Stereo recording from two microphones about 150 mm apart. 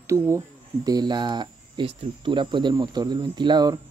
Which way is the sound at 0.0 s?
20° right (ahead or behind).